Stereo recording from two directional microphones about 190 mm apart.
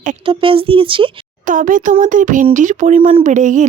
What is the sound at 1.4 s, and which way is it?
A woman's voice, 45° right (ahead or behind).